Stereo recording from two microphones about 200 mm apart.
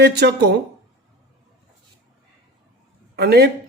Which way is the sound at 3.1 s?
55° right (ahead or behind).